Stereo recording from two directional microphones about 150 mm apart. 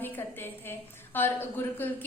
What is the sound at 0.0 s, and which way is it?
A woman's voice, 15° left (ahead or behind).